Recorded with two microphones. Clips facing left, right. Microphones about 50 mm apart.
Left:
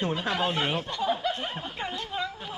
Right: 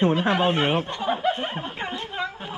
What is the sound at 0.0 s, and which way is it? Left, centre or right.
Speech, right.